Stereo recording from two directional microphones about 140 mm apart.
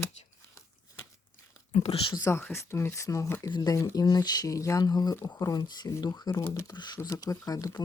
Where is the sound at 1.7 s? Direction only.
50° left (ahead or behind).